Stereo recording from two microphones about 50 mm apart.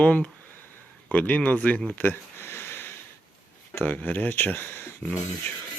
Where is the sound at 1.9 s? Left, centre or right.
Left.